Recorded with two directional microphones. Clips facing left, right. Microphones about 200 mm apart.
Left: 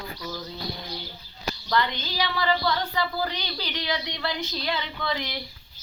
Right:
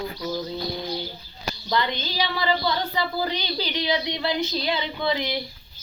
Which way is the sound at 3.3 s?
25° right (ahead or behind).